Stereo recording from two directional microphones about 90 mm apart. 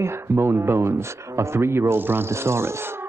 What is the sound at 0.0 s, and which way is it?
Speech, 25° right (ahead or behind).